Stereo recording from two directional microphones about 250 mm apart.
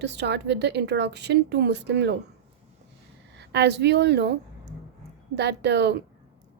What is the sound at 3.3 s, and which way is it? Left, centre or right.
Speech, right.